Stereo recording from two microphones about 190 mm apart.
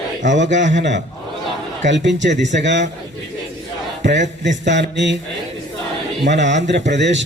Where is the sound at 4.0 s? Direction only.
65° right (ahead or behind).